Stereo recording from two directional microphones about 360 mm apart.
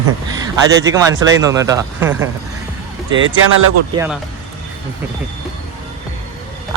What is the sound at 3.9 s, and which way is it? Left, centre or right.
Speech, centre.